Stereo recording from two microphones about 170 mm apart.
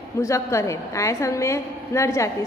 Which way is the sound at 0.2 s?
20° left (ahead or behind).